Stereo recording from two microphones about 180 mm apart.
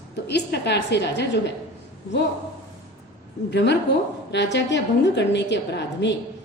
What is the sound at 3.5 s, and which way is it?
A woman's voice, 75° left (ahead or behind).